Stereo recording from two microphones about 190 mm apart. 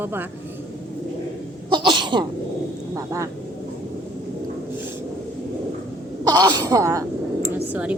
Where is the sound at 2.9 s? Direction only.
15° right (ahead or behind).